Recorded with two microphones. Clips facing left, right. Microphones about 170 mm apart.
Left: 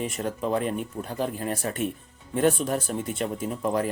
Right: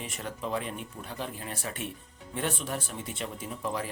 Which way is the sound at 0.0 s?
45° left (ahead or behind).